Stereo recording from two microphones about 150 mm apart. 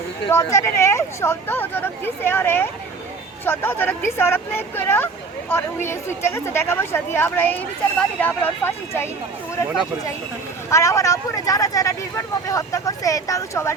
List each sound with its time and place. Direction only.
0.3 s speech: 15° left (ahead or behind)
10.7 s speech: 20° left (ahead or behind)